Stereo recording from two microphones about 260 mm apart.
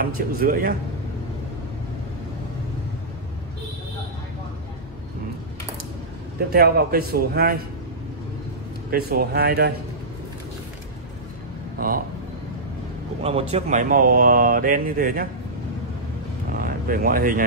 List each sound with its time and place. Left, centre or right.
0.0 s speech: right
6.5 s speech: right
8.9 s speech: right
13.2 s speech: right
16.6 s speech: right